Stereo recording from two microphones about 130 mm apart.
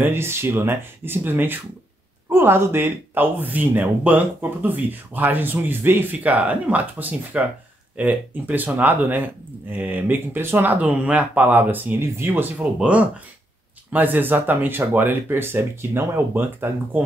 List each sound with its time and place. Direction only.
0.0 s speech: 20° right (ahead or behind)